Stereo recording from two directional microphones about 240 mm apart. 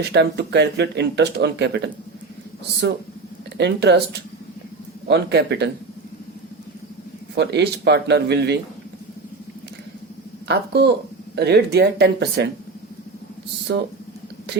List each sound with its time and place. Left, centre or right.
0.0 s speech: right
3.6 s speech: right
5.0 s speech: right
7.3 s speech: right
10.5 s speech: right
13.7 s speech: right